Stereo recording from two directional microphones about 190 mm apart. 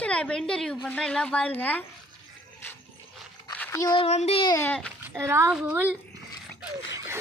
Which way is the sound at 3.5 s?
15° left (ahead or behind).